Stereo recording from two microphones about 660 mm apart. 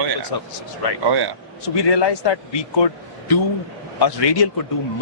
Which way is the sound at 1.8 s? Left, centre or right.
Left.